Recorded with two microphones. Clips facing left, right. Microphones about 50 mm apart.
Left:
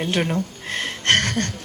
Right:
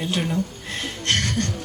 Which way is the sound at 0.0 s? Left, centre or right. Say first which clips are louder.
Left 2 dB; left.